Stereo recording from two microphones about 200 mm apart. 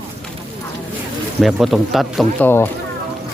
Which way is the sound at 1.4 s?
Centre (ahead or behind).